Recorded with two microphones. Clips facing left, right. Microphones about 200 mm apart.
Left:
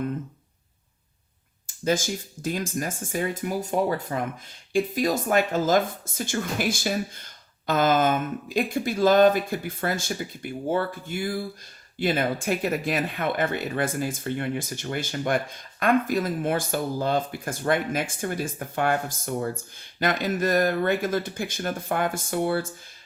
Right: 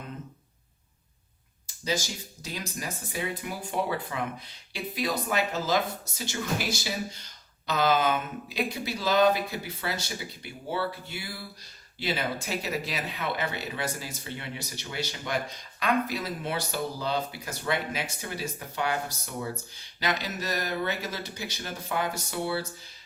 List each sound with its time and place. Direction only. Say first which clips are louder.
1.6 s speech: left 6 dB; 50° left (ahead or behind)